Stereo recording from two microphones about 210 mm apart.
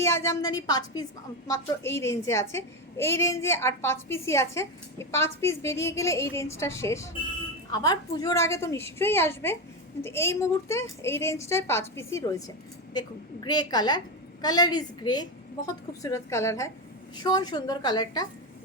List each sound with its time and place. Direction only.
0.0 s a woman's voice: 10° left (ahead or behind)